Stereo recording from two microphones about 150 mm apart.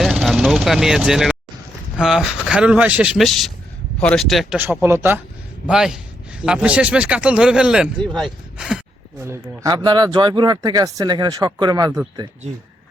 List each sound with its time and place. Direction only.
0.0 s vehicle: centre (ahead or behind)
2.0 s speech: 5° right (ahead or behind)
5.6 s speech: 5° right (ahead or behind)
9.2 s speech: 25° right (ahead or behind)